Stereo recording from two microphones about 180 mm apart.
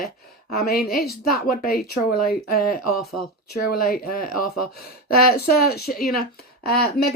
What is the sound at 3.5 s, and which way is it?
Speech, 55° left (ahead or behind).